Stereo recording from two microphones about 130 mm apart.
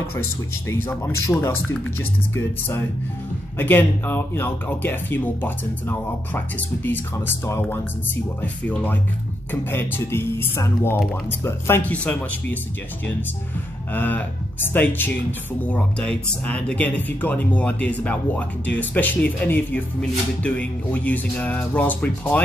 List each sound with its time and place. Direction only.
0.7 s speech: 15° left (ahead or behind)
2.3 s music: 20° left (ahead or behind)
3.5 s speech: 15° left (ahead or behind)
13.9 s speech: 15° left (ahead or behind)